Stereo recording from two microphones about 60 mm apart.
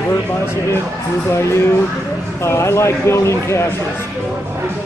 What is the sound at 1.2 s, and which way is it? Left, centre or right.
Speech, left.